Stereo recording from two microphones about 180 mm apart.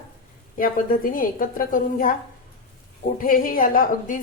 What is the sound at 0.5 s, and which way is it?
A woman's voice, 50° left (ahead or behind).